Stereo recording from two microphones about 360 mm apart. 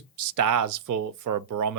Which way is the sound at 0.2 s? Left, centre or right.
Right.